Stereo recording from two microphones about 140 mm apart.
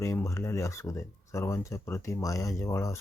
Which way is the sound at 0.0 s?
20° left (ahead or behind).